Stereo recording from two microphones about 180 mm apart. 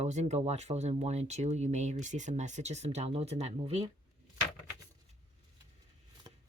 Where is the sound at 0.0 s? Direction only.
40° right (ahead or behind).